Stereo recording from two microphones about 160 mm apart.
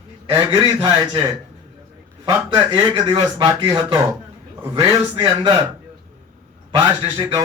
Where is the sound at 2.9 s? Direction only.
25° right (ahead or behind).